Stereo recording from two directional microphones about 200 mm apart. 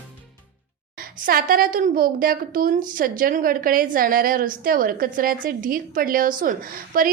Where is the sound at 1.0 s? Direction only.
45° right (ahead or behind).